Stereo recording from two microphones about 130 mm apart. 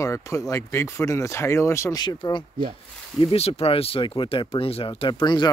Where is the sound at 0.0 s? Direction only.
25° left (ahead or behind).